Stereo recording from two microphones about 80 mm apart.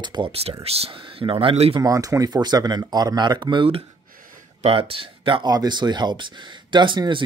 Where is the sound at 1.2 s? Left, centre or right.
Right.